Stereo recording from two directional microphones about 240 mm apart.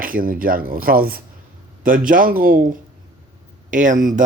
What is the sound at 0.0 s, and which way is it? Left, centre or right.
Speech, right.